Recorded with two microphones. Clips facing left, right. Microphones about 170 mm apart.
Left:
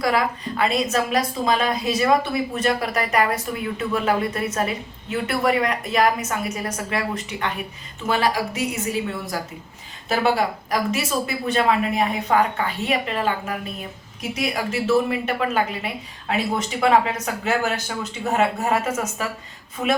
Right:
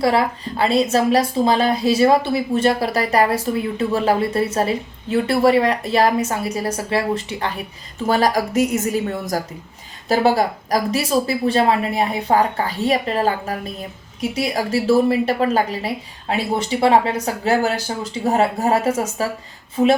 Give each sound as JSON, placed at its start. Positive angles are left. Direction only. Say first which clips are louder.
{"t": 0.0, "sound": "a woman's voice", "louder": "right 4 dB", "side_deg": -30}